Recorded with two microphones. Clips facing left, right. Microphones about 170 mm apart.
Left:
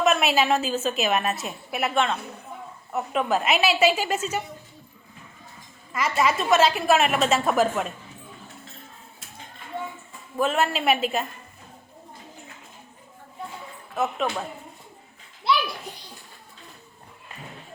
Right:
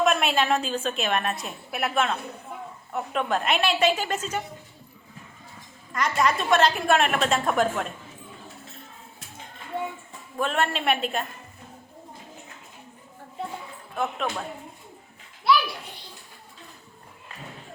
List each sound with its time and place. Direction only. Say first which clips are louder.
0.0 s a woman's voice: left 1 dB; centre (ahead or behind)
5.9 s a woman's voice: left 1 dB; 5° left (ahead or behind)
10.3 s a woman's voice: left 2 dB; 5° left (ahead or behind)
13.9 s a woman's voice: left 2 dB; 5° left (ahead or behind)
15.5 s children playing: right 2 dB; 25° left (ahead or behind)